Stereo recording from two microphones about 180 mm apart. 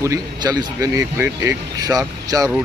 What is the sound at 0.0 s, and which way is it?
Speech, 20° right (ahead or behind).